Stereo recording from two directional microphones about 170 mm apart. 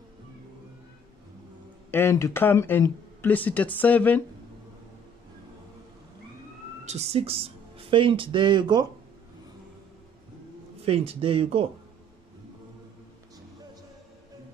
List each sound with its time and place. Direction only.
1.9 s speech: 15° left (ahead or behind)
6.8 s speech: 40° right (ahead or behind)
10.9 s a man's voice: 35° right (ahead or behind)